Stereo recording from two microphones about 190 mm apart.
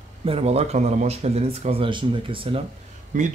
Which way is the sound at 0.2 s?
30° right (ahead or behind).